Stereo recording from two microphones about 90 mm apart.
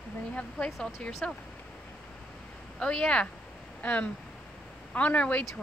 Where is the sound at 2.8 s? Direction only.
10° left (ahead or behind).